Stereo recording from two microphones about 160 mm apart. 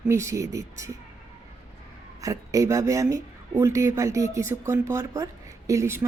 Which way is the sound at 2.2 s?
20° right (ahead or behind).